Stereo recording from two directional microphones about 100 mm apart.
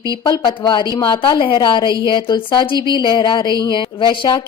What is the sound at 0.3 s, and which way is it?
Speech, 45° left (ahead or behind).